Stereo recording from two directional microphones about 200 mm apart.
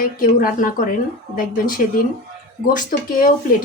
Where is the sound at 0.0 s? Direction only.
45° left (ahead or behind).